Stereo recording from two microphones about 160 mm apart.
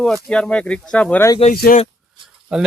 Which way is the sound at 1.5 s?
65° left (ahead or behind).